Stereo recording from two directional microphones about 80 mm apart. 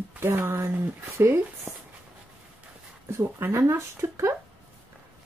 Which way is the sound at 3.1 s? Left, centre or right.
Right.